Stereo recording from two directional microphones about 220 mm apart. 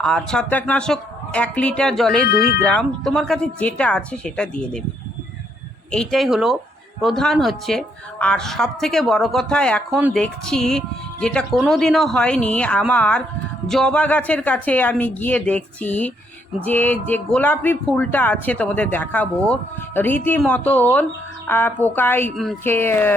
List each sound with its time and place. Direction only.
0.0 s speech: 5° left (ahead or behind)
2.2 s speech: 45° left (ahead or behind)
2.6 s speech: 5° left (ahead or behind)
5.9 s speech: centre (ahead or behind)